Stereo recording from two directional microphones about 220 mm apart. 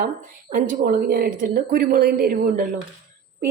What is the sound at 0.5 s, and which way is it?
A woman's voice, 40° right (ahead or behind).